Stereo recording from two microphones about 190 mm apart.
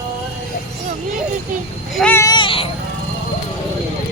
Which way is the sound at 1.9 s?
10° left (ahead or behind).